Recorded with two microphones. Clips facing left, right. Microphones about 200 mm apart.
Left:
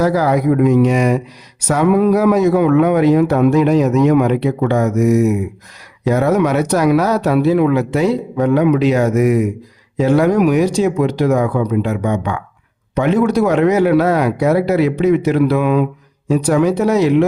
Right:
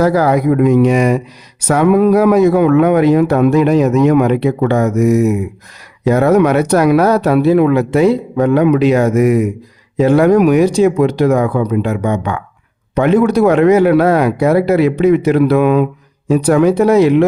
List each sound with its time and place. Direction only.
0.0 s speech: 60° right (ahead or behind)
6.1 s speech: 60° right (ahead or behind)